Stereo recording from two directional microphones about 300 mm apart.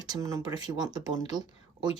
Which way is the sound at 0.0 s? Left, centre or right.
Centre.